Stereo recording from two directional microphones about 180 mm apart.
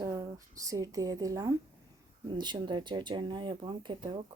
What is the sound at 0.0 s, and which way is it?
A woman's voice, 20° right (ahead or behind).